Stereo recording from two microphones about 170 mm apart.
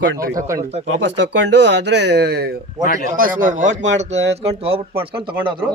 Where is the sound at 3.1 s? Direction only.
55° right (ahead or behind); by 5.6 s 30° right (ahead or behind).